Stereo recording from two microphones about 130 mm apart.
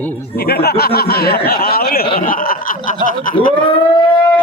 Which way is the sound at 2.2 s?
90° left.